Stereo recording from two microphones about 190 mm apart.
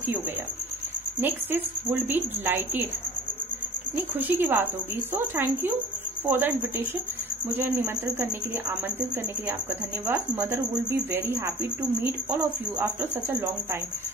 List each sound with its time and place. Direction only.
1.2 s speech: 10° right (ahead or behind)
3.9 s speech: 10° right (ahead or behind)
7.5 s speech: 10° right (ahead or behind)
10.0 s speech: 10° right (ahead or behind)
12.7 s speech: 15° right (ahead or behind)